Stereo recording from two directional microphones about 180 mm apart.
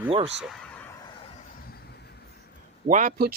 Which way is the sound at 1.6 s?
60° left (ahead or behind).